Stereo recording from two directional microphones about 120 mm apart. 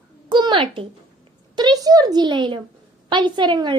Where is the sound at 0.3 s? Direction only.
40° right (ahead or behind).